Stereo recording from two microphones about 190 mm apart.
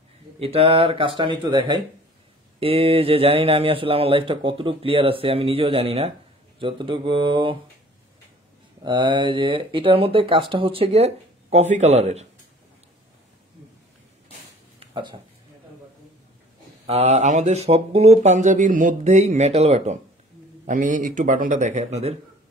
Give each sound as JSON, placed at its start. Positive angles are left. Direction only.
{"t": 0.4, "sound": "speech", "side_deg": -30}
{"t": 8.8, "sound": "speech", "side_deg": -25}
{"t": 14.8, "sound": "a sound", "side_deg": -25}
{"t": 16.8, "sound": "a man's voice", "side_deg": -35}